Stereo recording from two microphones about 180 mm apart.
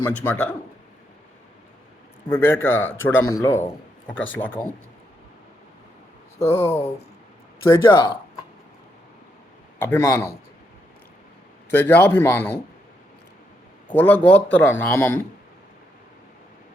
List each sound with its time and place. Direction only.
0.0 s a man's voice: 10° left (ahead or behind)
2.3 s a man's voice: 10° left (ahead or behind)
6.5 s a man's voice: 15° left (ahead or behind)
9.7 s a man's voice: 15° left (ahead or behind)
11.7 s a man's voice: 10° left (ahead or behind)
13.8 s a man's voice: 10° left (ahead or behind)